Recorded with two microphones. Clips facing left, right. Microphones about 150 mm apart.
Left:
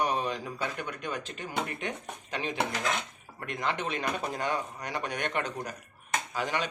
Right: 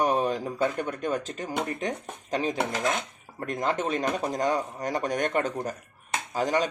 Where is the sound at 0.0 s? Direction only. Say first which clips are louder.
Right 5 dB; 45° right (ahead or behind).